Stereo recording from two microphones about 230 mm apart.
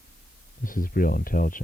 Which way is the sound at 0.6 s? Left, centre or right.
Left.